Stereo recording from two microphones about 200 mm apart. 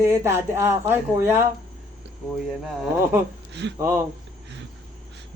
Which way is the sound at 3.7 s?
15° right (ahead or behind).